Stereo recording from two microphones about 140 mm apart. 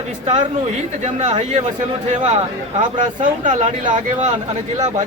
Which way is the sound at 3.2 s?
65° right (ahead or behind).